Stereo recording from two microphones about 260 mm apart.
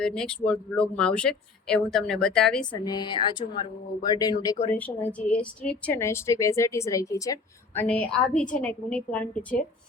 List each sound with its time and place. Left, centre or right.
0.0 s speech: centre
2.8 s a woman's voice: centre